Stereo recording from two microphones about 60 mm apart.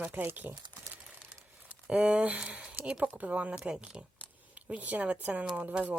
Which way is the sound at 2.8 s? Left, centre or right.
Centre.